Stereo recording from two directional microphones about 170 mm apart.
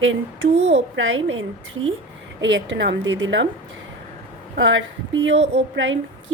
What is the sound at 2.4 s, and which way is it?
Speech, 90° right.